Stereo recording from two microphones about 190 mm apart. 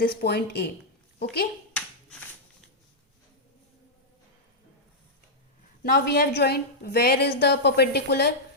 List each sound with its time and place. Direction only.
0.0 s a woman's voice: 55° left (ahead or behind)
5.8 s a woman's voice: 55° left (ahead or behind)